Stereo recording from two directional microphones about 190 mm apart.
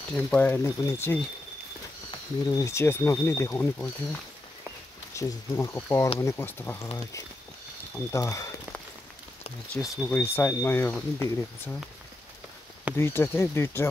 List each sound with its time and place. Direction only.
0.3 s speech: 10° left (ahead or behind)
5.1 s speech: 15° left (ahead or behind)
8.1 s speech: 15° left (ahead or behind)
9.8 s speech: centre (ahead or behind)
10.1 s speech: 10° left (ahead or behind)
12.9 s speech: 15° left (ahead or behind)